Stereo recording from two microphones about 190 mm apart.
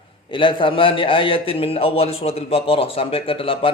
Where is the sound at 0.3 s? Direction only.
25° left (ahead or behind).